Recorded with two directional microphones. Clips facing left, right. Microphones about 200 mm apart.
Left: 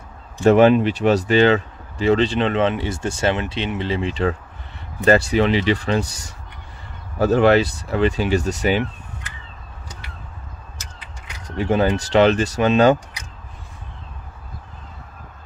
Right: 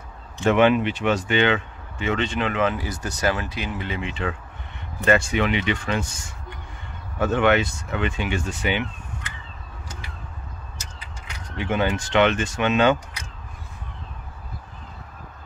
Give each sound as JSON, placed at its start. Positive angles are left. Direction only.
{"t": 0.4, "sound": "speech", "side_deg": 35}
{"t": 11.4, "sound": "speech", "side_deg": 40}